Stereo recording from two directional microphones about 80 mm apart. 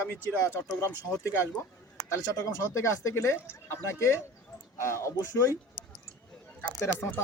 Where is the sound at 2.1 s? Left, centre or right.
Left.